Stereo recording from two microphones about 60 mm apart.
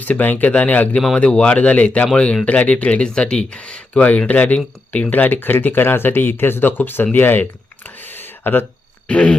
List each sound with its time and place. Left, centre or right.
0.0 s speech: left
5.1 s speech: left
7.9 s a sound: left
9.0 s speech: left